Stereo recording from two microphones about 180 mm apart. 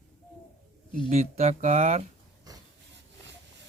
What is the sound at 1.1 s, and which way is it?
Speech, 40° right (ahead or behind).